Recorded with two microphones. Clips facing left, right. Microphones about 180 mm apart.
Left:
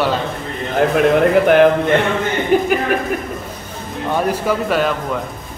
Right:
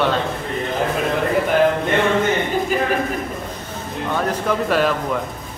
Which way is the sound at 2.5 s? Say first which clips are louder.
Left 7 dB; 70° left (ahead or behind).